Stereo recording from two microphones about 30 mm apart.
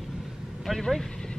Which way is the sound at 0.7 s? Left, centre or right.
Centre.